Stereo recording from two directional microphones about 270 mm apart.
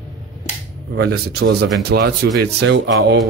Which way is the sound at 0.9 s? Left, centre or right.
Right.